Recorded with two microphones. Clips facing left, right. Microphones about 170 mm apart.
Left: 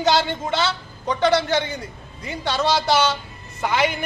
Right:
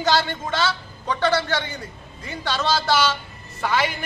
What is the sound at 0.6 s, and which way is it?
A man's voice, 15° left (ahead or behind).